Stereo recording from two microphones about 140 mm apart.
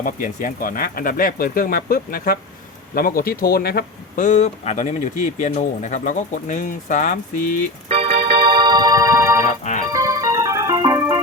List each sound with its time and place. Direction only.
0.0 s speech: 70° left (ahead or behind)
7.9 s organ: 45° right (ahead or behind); by 9.4 s 20° right (ahead or behind)
9.5 s music: 60° left (ahead or behind)
9.9 s organ: 25° right (ahead or behind)